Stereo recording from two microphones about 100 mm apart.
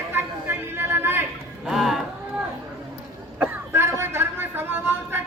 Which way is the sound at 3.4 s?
20° right (ahead or behind).